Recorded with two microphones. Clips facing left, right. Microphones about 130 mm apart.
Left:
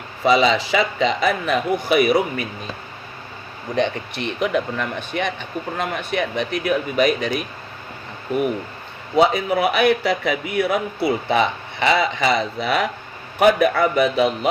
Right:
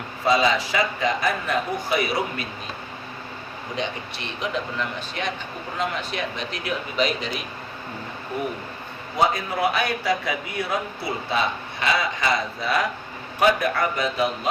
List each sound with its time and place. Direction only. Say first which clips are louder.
0.3 s a man's voice: left 4 dB; 75° left (ahead or behind)
3.8 s speech: left 9 dB; 60° left (ahead or behind)
9.1 s a man's voice: left 6 dB; 70° left (ahead or behind)